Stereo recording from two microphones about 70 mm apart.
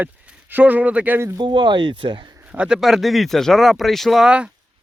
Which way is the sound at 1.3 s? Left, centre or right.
Right.